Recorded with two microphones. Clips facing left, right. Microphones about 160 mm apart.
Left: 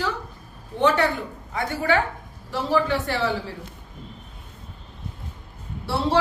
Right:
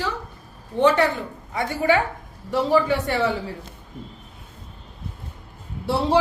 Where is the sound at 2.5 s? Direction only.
Centre (ahead or behind).